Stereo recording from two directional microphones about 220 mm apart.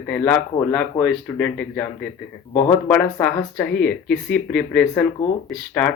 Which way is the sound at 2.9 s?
5° left (ahead or behind).